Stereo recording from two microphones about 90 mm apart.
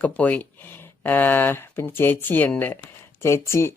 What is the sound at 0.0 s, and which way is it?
Speech, 20° left (ahead or behind).